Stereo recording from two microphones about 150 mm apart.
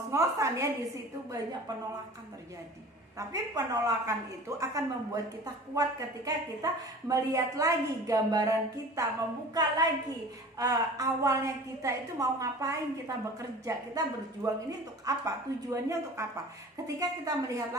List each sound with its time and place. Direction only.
0.1 s speech: 20° right (ahead or behind)
3.2 s speech: 25° right (ahead or behind)